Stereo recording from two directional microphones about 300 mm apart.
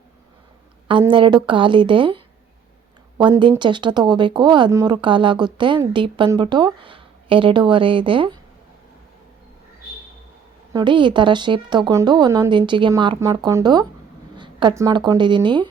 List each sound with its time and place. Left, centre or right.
1.1 s speech: centre
10.7 s speech: centre